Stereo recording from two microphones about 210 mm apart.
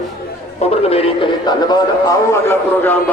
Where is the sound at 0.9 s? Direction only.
25° left (ahead or behind).